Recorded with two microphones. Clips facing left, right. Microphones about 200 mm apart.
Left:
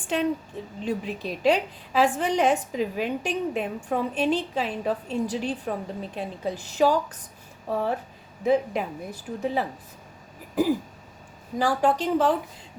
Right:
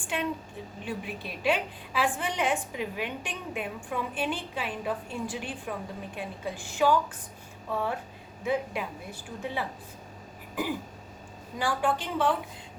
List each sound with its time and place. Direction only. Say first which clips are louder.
0.0 s a woman's voice: left 6 dB; 40° left (ahead or behind)
10.5 s throat clearing: left 9 dB; 40° left (ahead or behind)
11.5 s a woman's voice: left 6 dB; 40° left (ahead or behind)